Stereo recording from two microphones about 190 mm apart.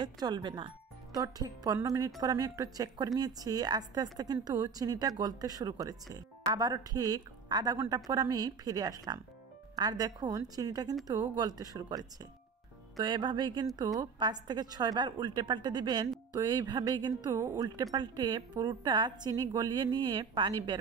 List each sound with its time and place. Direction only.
0.0 s a woman's voice: 25° right (ahead or behind)